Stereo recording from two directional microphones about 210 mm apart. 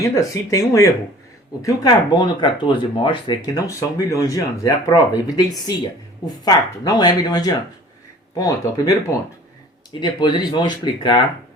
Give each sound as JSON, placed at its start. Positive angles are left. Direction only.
{"t": 0.0, "sound": "speech", "side_deg": 15}
{"t": 10.0, "sound": "speech", "side_deg": 20}